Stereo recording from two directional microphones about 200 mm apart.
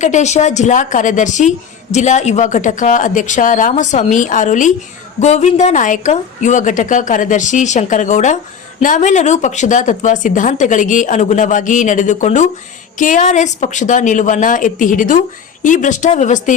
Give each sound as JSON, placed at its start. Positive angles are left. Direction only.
{"t": 0.0, "sound": "a woman's voice", "side_deg": 35}